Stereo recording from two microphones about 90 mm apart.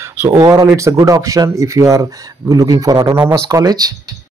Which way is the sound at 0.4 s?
45° right (ahead or behind).